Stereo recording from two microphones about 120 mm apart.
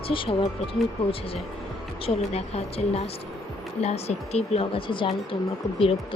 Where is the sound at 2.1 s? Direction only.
60° left (ahead or behind).